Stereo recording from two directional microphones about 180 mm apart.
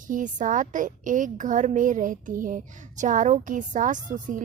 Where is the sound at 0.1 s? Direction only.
45° right (ahead or behind).